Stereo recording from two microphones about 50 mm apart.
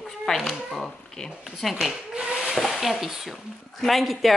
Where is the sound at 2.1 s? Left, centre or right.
Centre.